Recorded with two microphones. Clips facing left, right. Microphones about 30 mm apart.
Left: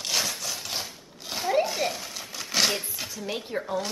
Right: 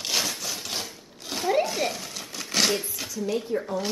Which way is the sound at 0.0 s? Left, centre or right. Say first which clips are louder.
Right 1 dB; centre.